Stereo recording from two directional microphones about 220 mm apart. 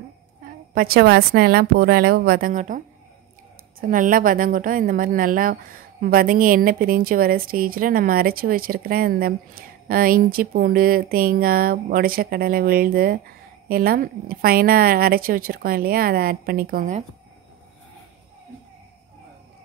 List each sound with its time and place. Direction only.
0.7 s a woman's voice: 45° right (ahead or behind)
3.8 s speech: 40° right (ahead or behind)